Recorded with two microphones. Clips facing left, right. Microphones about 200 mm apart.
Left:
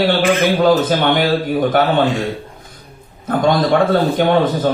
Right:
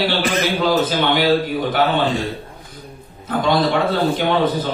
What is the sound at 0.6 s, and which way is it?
A man's voice, 50° left (ahead or behind).